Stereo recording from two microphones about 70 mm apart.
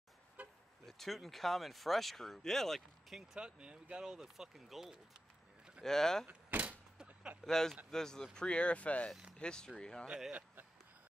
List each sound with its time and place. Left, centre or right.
0.4 s vehicle: right
0.8 s speech: centre
3.3 s speech: centre
5.9 s speech: centre
6.2 s door: right
7.4 s speech: centre
10.0 s speech: centre
10.3 s a sound: right